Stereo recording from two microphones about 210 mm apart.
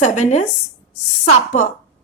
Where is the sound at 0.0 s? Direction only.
35° left (ahead or behind).